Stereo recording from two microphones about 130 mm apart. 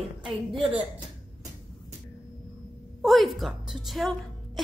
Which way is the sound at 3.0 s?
Centre (ahead or behind).